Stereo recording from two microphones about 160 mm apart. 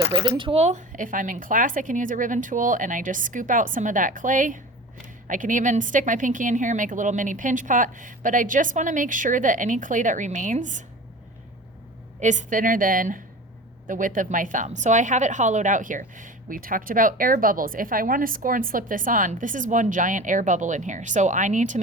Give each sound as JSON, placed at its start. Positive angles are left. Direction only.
{"t": 0.3, "sound": "a woman's voice", "side_deg": -30}
{"t": 12.2, "sound": "a woman's voice", "side_deg": -50}